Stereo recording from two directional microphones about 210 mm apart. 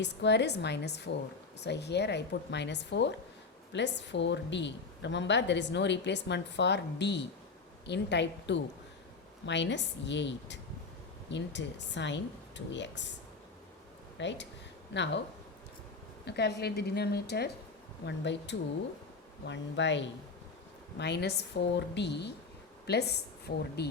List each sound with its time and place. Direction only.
0.0 s a woman's voice: 55° left (ahead or behind)
14.2 s a woman's voice: 60° left (ahead or behind)
16.2 s a woman's voice: 50° left (ahead or behind)